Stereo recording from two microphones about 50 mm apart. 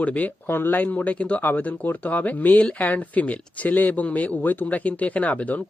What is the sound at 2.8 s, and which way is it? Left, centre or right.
Speech, left.